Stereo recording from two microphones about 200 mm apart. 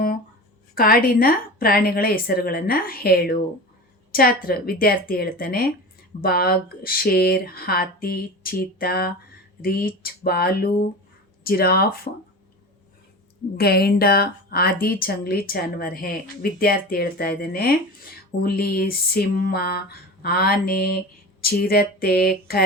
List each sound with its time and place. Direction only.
0.8 s speech: 50° left (ahead or behind)
13.6 s speech: 50° left (ahead or behind)